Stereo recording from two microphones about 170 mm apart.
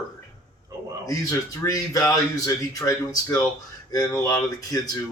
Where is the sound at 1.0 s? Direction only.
20° left (ahead or behind).